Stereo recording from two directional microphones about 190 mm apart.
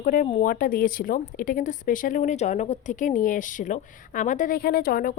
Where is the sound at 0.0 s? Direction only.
45° left (ahead or behind).